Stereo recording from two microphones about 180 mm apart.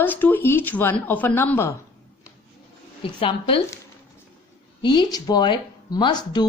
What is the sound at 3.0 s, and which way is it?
Speech, 30° left (ahead or behind).